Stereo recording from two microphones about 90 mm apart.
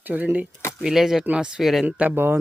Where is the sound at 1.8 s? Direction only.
15° right (ahead or behind).